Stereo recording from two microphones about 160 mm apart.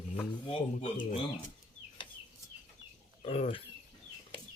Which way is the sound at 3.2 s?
40° left (ahead or behind).